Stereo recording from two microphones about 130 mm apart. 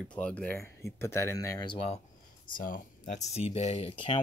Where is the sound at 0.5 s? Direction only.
20° left (ahead or behind).